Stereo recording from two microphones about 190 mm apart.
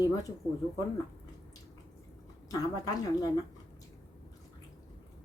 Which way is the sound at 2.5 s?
20° left (ahead or behind).